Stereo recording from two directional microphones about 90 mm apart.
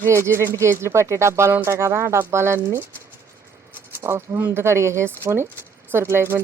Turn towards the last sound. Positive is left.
turn(degrees=-25)  # may be behind; listen again after turning